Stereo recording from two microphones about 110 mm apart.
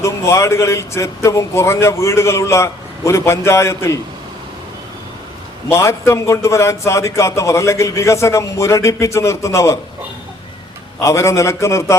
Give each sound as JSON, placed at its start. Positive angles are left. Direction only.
{"t": 0.0, "sound": "a man's voice", "side_deg": 25}
{"t": 5.7, "sound": "a man's voice", "side_deg": 25}
{"t": 11.0, "sound": "a man's voice", "side_deg": 25}